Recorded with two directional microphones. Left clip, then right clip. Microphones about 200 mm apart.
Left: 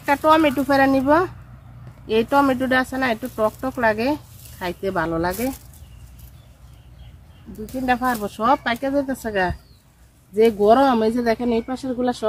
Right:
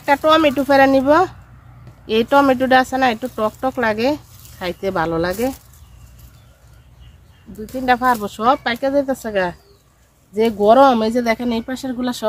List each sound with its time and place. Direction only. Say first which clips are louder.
0.0 s speech: right 3 dB; 40° right (ahead or behind)
7.6 s speech: right 5 dB; 40° right (ahead or behind); by 12.3 s 55° right (ahead or behind)